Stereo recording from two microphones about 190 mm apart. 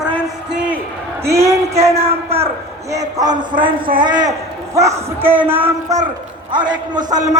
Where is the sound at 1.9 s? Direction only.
30° right (ahead or behind).